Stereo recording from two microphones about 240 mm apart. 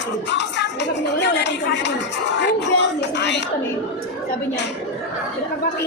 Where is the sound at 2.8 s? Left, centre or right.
Left.